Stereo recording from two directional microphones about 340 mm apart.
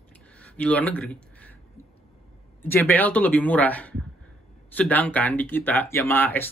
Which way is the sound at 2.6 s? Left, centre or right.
Centre.